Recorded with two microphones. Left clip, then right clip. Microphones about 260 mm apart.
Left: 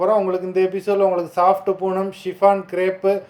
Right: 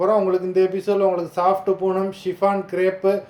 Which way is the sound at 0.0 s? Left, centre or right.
Centre.